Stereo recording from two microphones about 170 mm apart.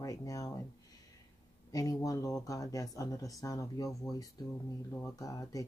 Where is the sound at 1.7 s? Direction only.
20° left (ahead or behind).